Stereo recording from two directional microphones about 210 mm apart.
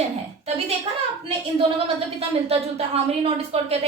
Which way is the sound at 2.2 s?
30° right (ahead or behind).